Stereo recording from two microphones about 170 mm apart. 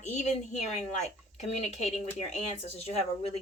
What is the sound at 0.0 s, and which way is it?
Speech, 45° left (ahead or behind).